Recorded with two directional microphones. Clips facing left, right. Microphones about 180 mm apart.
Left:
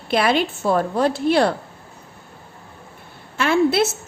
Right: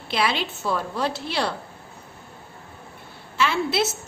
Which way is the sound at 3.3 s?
50° left (ahead or behind).